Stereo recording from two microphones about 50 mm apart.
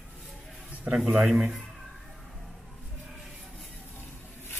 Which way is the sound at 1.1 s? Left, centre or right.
Centre.